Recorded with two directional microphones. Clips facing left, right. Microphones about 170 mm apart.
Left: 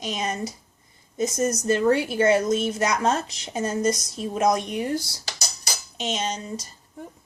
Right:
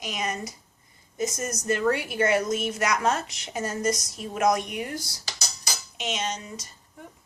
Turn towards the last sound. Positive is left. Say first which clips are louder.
# left 3 dB
turn(degrees=30)  # may be behind; listen again after turning